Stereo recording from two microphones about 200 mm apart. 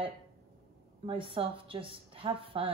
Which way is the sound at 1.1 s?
25° right (ahead or behind).